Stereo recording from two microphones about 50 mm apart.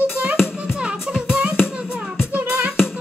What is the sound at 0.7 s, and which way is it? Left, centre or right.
Music, centre.